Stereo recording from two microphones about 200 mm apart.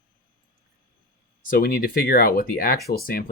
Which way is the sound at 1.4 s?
45° left (ahead or behind).